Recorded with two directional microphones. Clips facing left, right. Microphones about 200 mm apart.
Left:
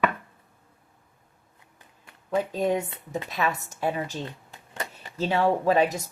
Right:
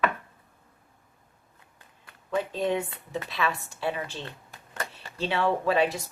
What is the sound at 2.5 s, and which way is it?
Speech, 45° left (ahead or behind).